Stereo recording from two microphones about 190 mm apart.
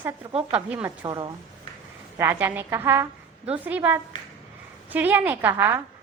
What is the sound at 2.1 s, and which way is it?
A woman's voice, 10° right (ahead or behind).